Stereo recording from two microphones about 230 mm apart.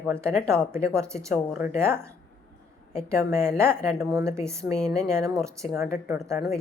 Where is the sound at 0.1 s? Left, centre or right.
Centre.